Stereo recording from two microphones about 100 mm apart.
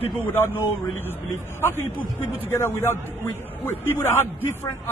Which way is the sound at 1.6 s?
25° left (ahead or behind).